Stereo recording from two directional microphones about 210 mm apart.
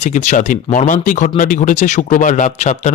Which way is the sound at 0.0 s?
35° left (ahead or behind).